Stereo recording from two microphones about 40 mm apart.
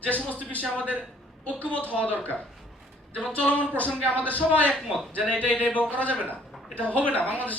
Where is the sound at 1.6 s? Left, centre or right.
Left.